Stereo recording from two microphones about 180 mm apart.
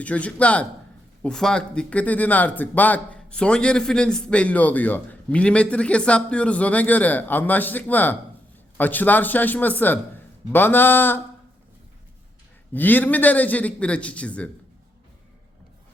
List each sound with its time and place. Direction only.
0.0 s speech: 5° left (ahead or behind)
12.7 s speech: 10° left (ahead or behind)